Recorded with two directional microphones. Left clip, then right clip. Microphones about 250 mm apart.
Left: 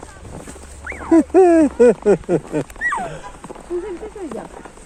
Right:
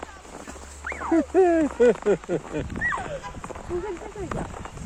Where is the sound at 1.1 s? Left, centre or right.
Left.